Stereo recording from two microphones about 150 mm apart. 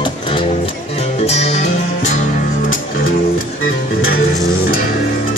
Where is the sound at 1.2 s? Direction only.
45° left (ahead or behind).